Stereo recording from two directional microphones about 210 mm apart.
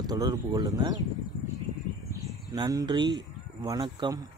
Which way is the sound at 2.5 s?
15° right (ahead or behind).